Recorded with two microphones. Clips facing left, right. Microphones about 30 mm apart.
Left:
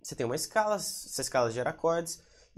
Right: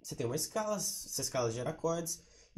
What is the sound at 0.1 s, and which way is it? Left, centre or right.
Speech, left.